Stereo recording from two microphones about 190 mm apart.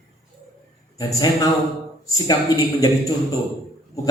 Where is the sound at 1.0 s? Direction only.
20° left (ahead or behind).